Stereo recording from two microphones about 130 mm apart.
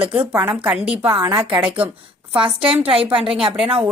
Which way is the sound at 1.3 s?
35° right (ahead or behind).